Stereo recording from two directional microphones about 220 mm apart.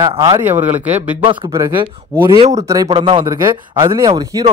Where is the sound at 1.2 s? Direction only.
20° right (ahead or behind).